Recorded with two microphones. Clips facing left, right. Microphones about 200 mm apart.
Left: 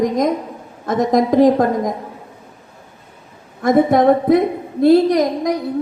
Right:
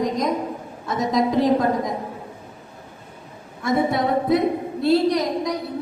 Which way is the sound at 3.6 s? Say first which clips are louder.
Left 8 dB; 45° left (ahead or behind).